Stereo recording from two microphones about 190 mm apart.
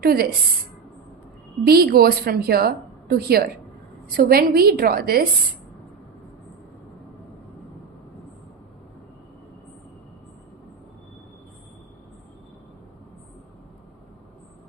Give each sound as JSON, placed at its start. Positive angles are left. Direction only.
{"t": 0.0, "sound": "a woman's voice", "side_deg": -55}
{"t": 1.6, "sound": "a woman's voice", "side_deg": -55}